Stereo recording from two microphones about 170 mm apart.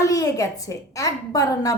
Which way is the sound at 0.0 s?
20° left (ahead or behind).